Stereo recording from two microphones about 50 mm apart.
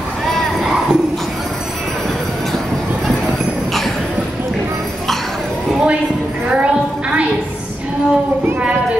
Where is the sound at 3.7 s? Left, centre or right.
Centre.